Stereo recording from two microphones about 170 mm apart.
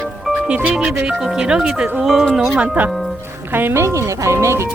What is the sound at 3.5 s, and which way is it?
Speech, 15° right (ahead or behind).